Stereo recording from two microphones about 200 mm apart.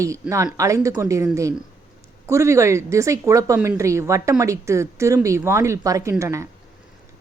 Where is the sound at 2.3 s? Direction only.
15° right (ahead or behind).